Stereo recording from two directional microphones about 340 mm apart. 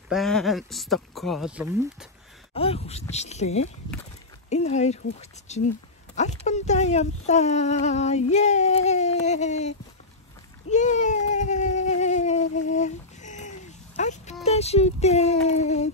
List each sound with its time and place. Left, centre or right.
0.1 s speech: centre
2.5 s speech: centre
10.7 s a sound: left
14.4 s speech: centre